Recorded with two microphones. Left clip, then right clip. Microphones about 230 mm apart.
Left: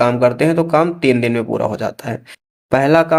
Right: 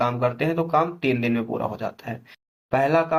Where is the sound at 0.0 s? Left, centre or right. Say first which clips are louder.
Left 10 dB; left.